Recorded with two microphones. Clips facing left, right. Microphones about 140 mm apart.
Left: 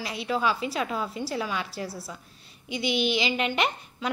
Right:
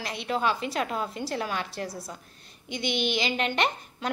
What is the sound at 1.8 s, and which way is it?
Speech, 45° right (ahead or behind).